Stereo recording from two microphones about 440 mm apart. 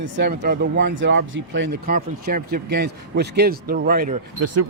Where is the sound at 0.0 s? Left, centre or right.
Right.